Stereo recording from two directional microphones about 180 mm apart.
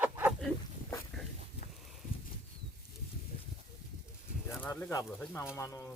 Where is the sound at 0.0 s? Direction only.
10° right (ahead or behind).